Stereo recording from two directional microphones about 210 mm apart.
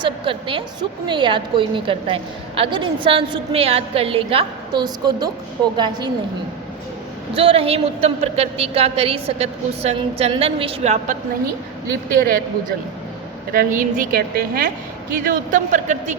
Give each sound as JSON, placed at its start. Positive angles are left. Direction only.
{"t": 0.0, "sound": "a woman's voice", "side_deg": -25}
{"t": 7.3, "sound": "a woman's voice", "side_deg": -25}
{"t": 12.2, "sound": "a woman's voice", "side_deg": -45}